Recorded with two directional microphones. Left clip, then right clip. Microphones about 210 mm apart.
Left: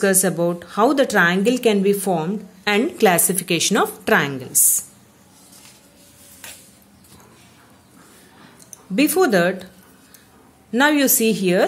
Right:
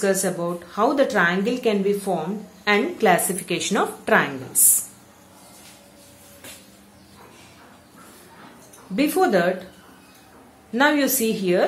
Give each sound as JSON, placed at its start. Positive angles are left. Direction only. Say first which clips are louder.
{"t": 0.0, "sound": "speech", "louder": "left 4 dB", "side_deg": 45}
{"t": 8.9, "sound": "speech", "louder": "left 3 dB", "side_deg": 45}
{"t": 10.7, "sound": "speech", "louder": "left 2 dB", "side_deg": 45}